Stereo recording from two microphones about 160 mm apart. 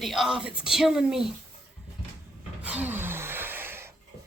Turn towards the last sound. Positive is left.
turn(degrees=-15)  # may be behind; listen again after turning